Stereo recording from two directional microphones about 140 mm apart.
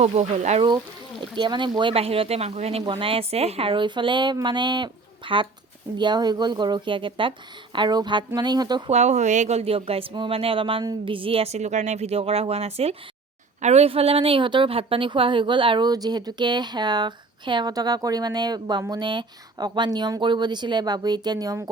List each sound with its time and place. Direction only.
0.0 s speech: 50° right (ahead or behind)
1.4 s a woman's voice: 35° right (ahead or behind)
8.9 s a woman's voice: 55° right (ahead or behind); by 21.6 s 25° right (ahead or behind)